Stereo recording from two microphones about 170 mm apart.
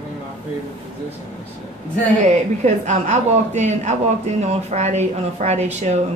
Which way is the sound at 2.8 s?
45° right (ahead or behind).